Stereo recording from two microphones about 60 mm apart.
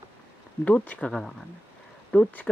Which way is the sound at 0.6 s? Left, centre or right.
Left.